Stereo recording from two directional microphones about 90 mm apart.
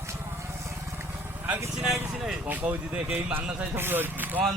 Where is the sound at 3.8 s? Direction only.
25° right (ahead or behind).